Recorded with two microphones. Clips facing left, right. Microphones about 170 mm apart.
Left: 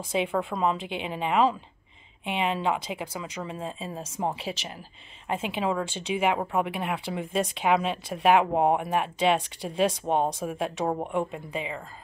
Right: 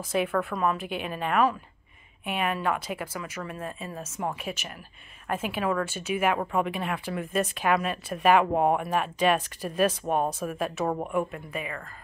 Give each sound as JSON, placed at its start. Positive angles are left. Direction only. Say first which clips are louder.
{"t": 0.1, "sound": "speech", "louder": "even", "side_deg": 15}